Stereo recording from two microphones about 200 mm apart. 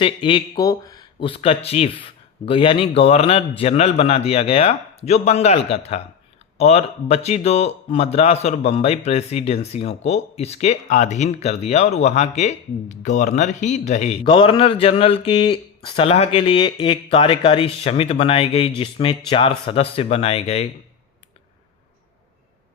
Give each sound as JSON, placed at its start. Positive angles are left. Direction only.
{"t": 0.0, "sound": "speech", "side_deg": 25}